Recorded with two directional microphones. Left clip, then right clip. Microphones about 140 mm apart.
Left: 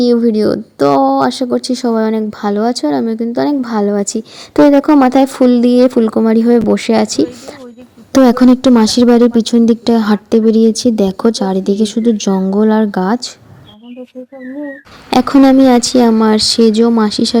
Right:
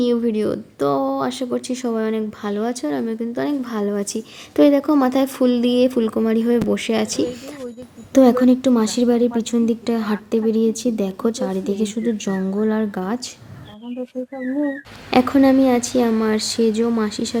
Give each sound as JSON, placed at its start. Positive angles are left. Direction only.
{"t": 0.4, "sound": "speech", "side_deg": 5}
{"t": 1.2, "sound": "speech", "side_deg": 30}
{"t": 4.9, "sound": "a woman's voice", "side_deg": 5}
{"t": 5.5, "sound": "speech", "side_deg": 30}
{"t": 8.1, "sound": "a woman's voice", "side_deg": 10}
{"t": 8.4, "sound": "speech", "side_deg": 40}
{"t": 15.1, "sound": "speech", "side_deg": 45}